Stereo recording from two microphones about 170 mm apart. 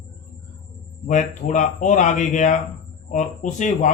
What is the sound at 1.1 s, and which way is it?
Speech, 45° left (ahead or behind).